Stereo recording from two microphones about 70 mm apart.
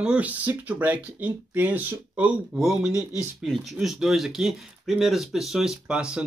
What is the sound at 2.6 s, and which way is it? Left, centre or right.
A man's voice, centre.